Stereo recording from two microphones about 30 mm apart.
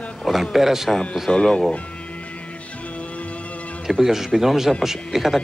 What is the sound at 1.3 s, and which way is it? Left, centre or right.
Speech, left.